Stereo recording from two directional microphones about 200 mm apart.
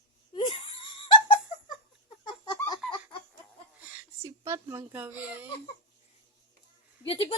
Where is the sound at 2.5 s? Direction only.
20° left (ahead or behind).